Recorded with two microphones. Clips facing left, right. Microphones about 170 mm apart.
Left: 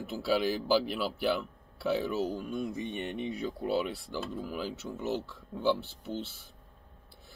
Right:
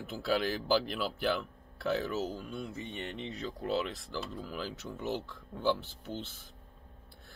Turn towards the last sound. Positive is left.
turn(degrees=10)  # may be behind; listen again after turning